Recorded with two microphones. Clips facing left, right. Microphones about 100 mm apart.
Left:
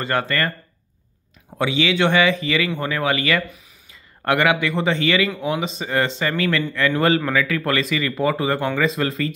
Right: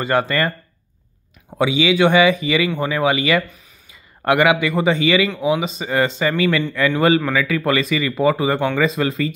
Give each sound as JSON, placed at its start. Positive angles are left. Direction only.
{"t": 0.0, "sound": "speech", "side_deg": -15}
{"t": 1.6, "sound": "speech", "side_deg": -10}
{"t": 3.4, "sound": "speech", "side_deg": 0}
{"t": 4.2, "sound": "speech", "side_deg": -10}